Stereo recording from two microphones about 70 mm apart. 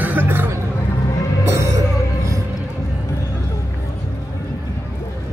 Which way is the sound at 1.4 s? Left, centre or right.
Right.